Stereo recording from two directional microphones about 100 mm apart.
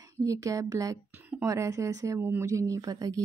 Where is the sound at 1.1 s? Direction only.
15° right (ahead or behind).